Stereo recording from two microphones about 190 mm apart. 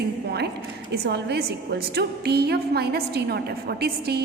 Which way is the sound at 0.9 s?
60° right (ahead or behind).